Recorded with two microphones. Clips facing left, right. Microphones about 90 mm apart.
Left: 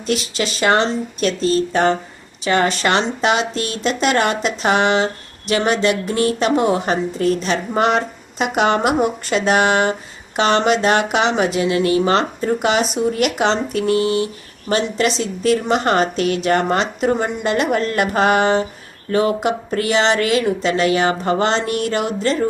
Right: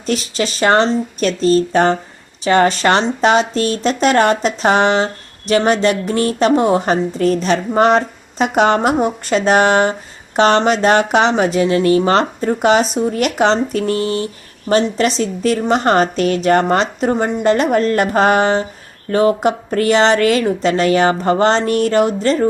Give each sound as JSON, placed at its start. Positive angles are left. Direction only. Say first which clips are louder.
{"t": 0.0, "sound": "a woman's voice", "louder": "right 2 dB", "side_deg": -40}